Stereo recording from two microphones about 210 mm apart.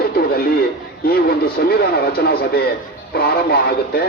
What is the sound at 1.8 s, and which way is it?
Speech, 45° left (ahead or behind).